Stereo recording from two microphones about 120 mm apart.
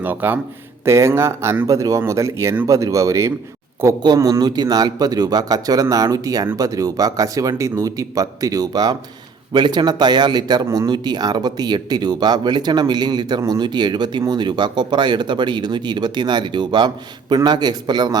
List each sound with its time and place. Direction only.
0.0 s speech: 15° right (ahead or behind); by 18.2 s 35° right (ahead or behind)